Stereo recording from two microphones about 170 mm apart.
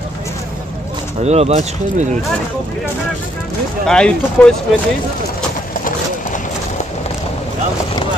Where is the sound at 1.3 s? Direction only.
40° right (ahead or behind).